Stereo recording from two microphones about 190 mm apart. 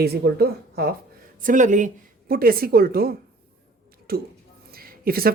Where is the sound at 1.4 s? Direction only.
40° right (ahead or behind).